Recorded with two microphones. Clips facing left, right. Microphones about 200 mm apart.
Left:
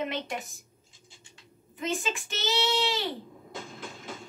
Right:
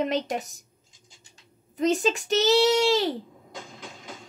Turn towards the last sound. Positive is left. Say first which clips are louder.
# right 8 dB
turn(degrees=-40)  # may be behind; listen again after turning